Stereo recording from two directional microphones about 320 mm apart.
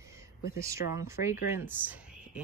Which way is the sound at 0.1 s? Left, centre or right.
Centre.